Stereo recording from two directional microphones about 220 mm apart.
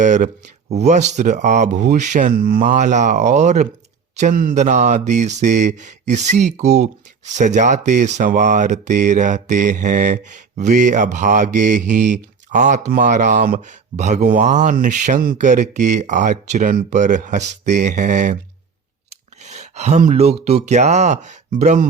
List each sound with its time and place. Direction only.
0.0 s mantra: 35° right (ahead or behind)
19.4 s speech: 30° right (ahead or behind)